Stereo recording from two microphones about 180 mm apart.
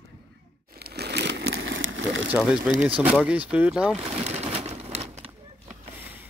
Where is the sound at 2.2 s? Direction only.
5° right (ahead or behind).